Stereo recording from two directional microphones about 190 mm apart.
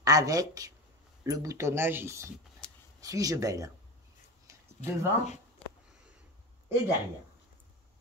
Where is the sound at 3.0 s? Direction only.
20° right (ahead or behind).